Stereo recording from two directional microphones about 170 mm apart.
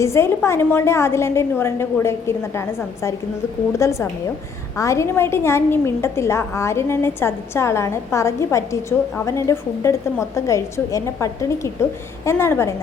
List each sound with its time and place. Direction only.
0.0 s a woman's voice: 15° left (ahead or behind)